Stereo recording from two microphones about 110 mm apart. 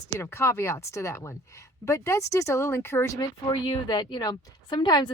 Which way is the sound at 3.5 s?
45° left (ahead or behind).